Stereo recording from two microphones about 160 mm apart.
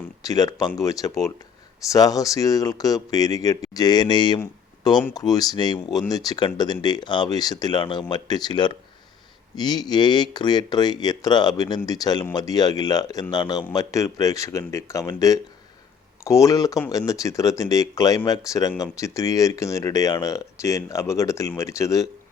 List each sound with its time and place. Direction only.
0.2 s speech: 20° left (ahead or behind)